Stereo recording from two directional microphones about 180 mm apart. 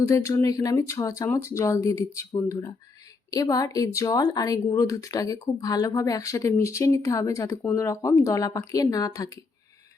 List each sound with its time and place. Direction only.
0.0 s speech: 15° left (ahead or behind)